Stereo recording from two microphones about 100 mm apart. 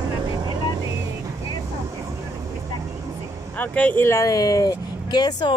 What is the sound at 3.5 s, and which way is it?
Speech, 15° left (ahead or behind).